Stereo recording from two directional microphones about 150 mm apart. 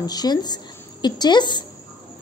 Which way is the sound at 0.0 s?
25° left (ahead or behind).